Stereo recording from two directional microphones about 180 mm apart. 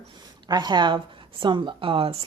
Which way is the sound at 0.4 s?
25° right (ahead or behind).